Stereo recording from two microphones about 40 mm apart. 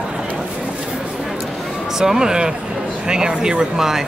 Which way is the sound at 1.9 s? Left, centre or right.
Centre.